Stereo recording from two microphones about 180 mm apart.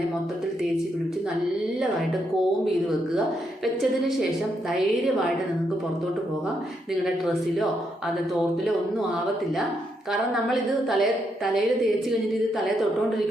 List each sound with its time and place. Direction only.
3.2 s a woman's voice: centre (ahead or behind)
10.1 s a woman's voice: centre (ahead or behind)